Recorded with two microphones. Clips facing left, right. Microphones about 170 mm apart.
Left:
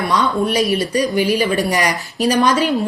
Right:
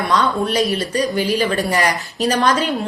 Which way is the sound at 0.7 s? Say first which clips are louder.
Left 2 dB; 15° left (ahead or behind).